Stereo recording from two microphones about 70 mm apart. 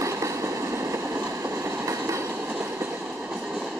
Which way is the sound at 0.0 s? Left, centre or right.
Right.